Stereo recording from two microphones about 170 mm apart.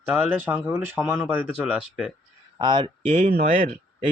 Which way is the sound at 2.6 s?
25° right (ahead or behind).